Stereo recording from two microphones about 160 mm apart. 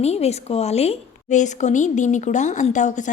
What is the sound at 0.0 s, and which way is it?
Speech, 40° left (ahead or behind).